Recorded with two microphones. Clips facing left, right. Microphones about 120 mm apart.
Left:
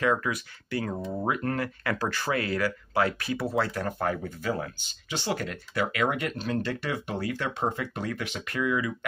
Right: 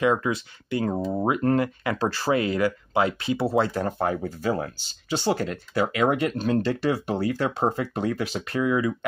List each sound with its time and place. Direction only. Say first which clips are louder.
0.0 s speech: right 4 dB; 20° right (ahead or behind)
2.4 s speech: right 5 dB; 20° right (ahead or behind); by 8.9 s 35° right (ahead or behind)